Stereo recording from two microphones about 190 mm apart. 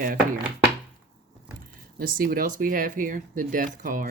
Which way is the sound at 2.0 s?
50° right (ahead or behind).